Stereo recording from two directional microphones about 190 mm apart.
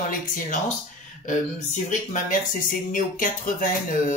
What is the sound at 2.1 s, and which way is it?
Speech, 45° left (ahead or behind).